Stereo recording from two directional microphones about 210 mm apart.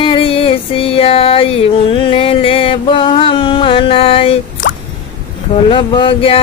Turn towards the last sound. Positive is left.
turn(degrees=25)  # may be behind; listen again after turning